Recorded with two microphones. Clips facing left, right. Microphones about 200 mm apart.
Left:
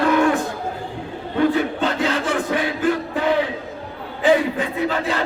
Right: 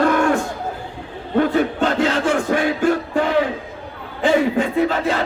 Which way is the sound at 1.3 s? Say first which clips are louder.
Right 2 dB; 50° right (ahead or behind).